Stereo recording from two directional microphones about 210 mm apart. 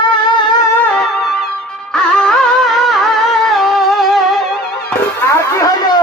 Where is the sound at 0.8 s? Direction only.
5° left (ahead or behind).